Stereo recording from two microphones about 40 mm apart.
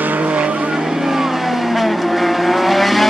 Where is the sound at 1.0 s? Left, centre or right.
Centre.